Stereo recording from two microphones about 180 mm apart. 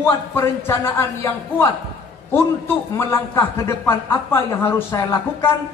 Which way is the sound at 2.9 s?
15° left (ahead or behind).